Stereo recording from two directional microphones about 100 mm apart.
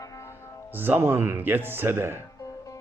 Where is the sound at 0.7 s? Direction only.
20° right (ahead or behind).